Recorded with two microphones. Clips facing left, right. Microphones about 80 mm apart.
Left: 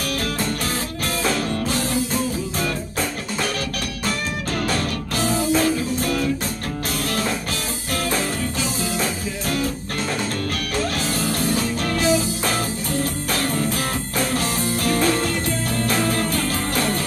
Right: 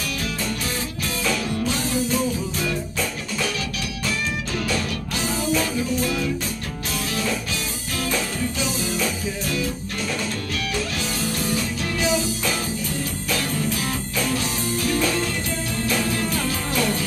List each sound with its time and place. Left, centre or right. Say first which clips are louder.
1.2 s music: left 1 dB; left
4.6 s music: left 3 dB; left
8.9 s music: left 1 dB; left
10.8 s music: left 3 dB; left